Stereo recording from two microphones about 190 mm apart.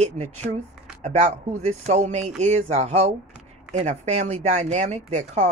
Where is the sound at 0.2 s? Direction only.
40° right (ahead or behind).